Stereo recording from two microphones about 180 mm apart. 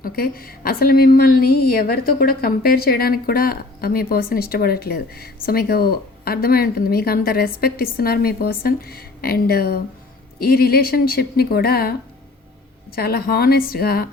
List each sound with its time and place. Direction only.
0.0 s a woman's voice: 55° left (ahead or behind)
13.0 s a woman's voice: 60° left (ahead or behind)